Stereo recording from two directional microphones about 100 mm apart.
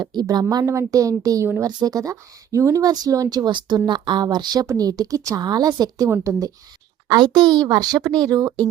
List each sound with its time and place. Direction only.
0.0 s a child's voice: 45° right (ahead or behind)
0.5 s a child's voice: 35° right (ahead or behind)
4.6 s speech: 25° right (ahead or behind)
4.9 s speech: 40° right (ahead or behind)
7.1 s a child's voice: 45° right (ahead or behind)